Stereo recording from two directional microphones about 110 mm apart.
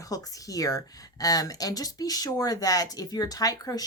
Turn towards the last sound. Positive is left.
turn(degrees=35)  # may be behind; listen again after turning